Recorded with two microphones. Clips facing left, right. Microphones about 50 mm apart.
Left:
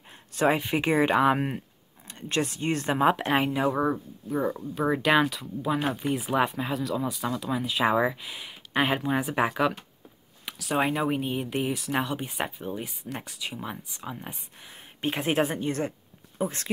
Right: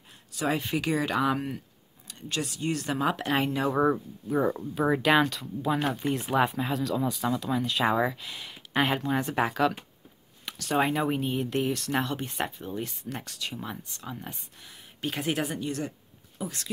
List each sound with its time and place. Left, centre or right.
0.6 s speech: left
3.2 s speech: centre
3.7 s speech: centre
14.7 s a woman's voice: left